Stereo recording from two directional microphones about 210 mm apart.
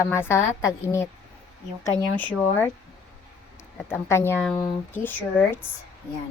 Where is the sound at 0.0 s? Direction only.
10° left (ahead or behind).